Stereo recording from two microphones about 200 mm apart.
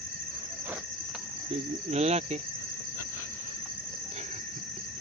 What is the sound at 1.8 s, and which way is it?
Speech, 30° right (ahead or behind).